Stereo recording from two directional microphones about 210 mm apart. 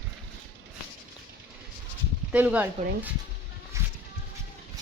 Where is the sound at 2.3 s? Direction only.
10° right (ahead or behind).